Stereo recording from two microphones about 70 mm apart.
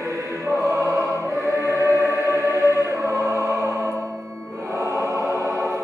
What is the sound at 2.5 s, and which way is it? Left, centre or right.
Music, right.